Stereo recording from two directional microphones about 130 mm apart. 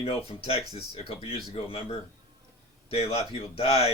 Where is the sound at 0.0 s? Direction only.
50° left (ahead or behind).